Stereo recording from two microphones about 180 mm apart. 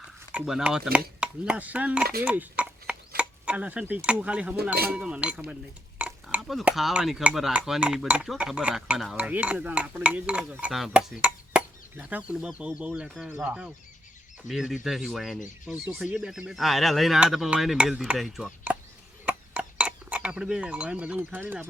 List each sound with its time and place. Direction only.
0.3 s speech: 5° right (ahead or behind)
0.9 s a sound: 5° right (ahead or behind)
2.2 s dishes: 10° right (ahead or behind)
3.2 s speech: 5° right (ahead or behind)
4.9 s a sound: 5° right (ahead or behind)
6.0 s cutlery: 5° right (ahead or behind)